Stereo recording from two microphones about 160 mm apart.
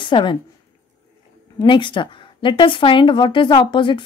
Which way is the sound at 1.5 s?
30° left (ahead or behind).